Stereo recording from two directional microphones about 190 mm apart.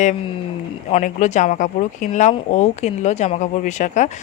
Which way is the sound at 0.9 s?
40° left (ahead or behind).